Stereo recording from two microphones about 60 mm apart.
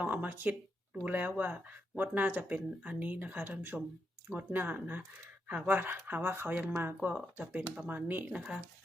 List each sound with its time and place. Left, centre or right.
0.0 s speech: right
8.3 s speech: centre